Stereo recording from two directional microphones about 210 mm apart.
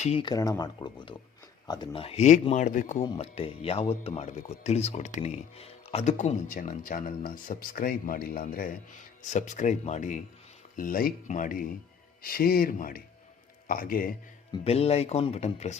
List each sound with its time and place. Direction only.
0.0 s speech: 25° left (ahead or behind); by 14.1 s 40° left (ahead or behind)
14.5 s speech: 30° left (ahead or behind)